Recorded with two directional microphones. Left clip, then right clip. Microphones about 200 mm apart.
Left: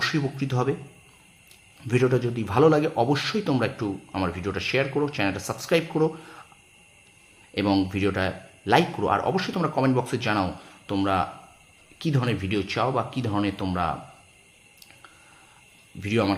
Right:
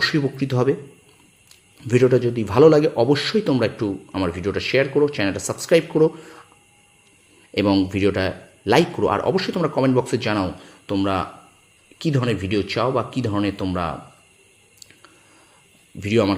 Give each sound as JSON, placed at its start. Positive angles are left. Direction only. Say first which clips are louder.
{"t": 0.0, "sound": "a man's voice", "louder": "right 6 dB", "side_deg": -15}
{"t": 1.8, "sound": "a man's voice", "louder": "right 6 dB", "side_deg": -15}
{"t": 7.5, "sound": "a man's voice", "louder": "right 5 dB", "side_deg": -15}
{"t": 16.0, "sound": "a man's voice", "louder": "right 5 dB", "side_deg": -15}